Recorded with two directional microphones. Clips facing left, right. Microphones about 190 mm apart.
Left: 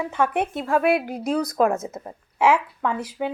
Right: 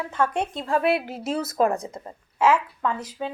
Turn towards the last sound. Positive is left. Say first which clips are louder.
# left 2 dB
turn(degrees=10)  # may be behind; listen again after turning